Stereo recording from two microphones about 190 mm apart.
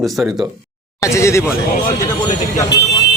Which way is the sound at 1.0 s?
15° left (ahead or behind).